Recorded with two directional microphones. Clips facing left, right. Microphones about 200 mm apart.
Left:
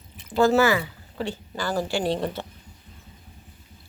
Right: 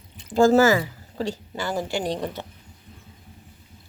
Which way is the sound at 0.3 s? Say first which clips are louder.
Right 3 dB; 45° right (ahead or behind).